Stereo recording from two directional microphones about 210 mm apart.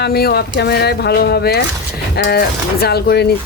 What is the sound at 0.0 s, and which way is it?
Speech, 50° left (ahead or behind).